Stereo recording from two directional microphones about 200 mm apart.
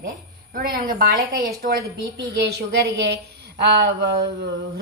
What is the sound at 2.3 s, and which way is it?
Speech, 55° right (ahead or behind).